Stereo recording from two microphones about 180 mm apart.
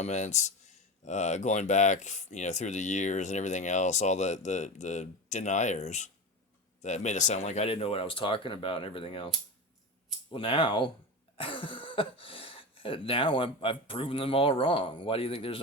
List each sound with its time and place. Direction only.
0.0 s speech: 40° left (ahead or behind)